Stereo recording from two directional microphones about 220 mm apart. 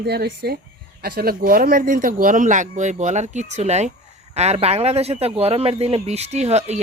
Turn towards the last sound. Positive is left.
turn(degrees=-30)  # may be behind; listen again after turning